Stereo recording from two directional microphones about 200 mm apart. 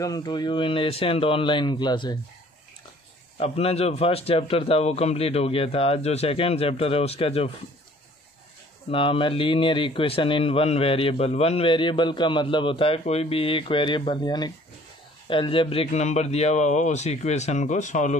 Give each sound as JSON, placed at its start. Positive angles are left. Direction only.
{"t": 0.0, "sound": "speech", "side_deg": 20}
{"t": 3.3, "sound": "speech", "side_deg": 30}
{"t": 8.9, "sound": "speech", "side_deg": 25}